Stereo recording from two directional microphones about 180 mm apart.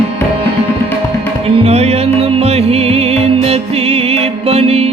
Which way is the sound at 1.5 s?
35° right (ahead or behind).